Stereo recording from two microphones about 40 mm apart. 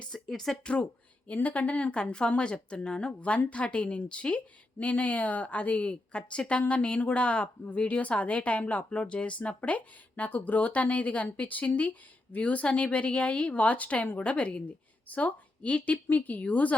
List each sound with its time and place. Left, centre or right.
0.3 s speech: centre
0.6 s a woman's voice: left
1.3 s speech: left
2.0 s a woman's voice: left
3.1 s a woman's voice: left